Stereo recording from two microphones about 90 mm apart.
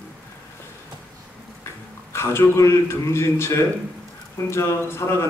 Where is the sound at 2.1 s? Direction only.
30° left (ahead or behind).